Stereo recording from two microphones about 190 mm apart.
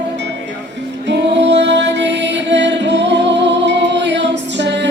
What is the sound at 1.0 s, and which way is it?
Music, 65° right (ahead or behind).